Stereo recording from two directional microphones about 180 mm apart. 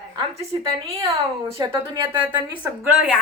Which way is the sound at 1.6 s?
25° right (ahead or behind).